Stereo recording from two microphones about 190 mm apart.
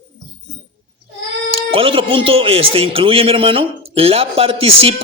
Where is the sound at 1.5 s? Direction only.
30° right (ahead or behind).